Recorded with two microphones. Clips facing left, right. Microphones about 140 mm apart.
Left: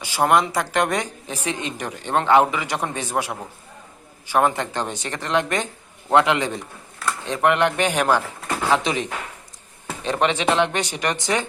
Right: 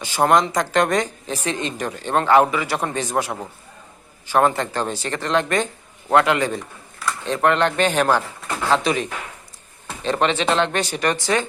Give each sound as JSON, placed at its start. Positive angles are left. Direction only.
{"t": 0.0, "sound": "speech", "side_deg": 10}
{"t": 4.3, "sound": "a man's voice", "side_deg": 15}